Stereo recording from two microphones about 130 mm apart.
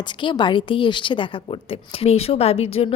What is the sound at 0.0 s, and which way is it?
A woman's voice, 35° left (ahead or behind).